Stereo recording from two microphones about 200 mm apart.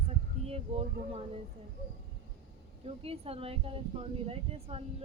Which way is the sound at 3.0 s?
30° right (ahead or behind).